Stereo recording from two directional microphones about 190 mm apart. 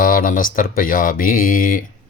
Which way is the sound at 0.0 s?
45° left (ahead or behind).